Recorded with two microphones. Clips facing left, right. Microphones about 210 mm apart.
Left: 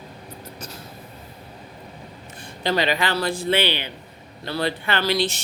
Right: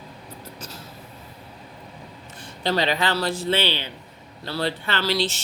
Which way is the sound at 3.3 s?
15° left (ahead or behind).